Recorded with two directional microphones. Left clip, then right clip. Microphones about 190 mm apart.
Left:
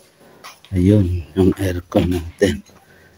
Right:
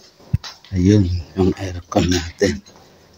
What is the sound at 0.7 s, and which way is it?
Speech, 20° left (ahead or behind).